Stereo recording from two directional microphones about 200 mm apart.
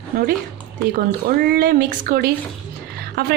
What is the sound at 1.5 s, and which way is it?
A woman's voice, 45° right (ahead or behind).